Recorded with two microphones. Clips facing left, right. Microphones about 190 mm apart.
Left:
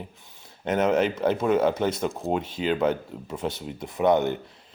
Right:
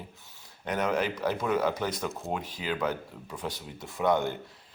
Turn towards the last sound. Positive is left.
turn(degrees=20)  # may be behind; listen again after turning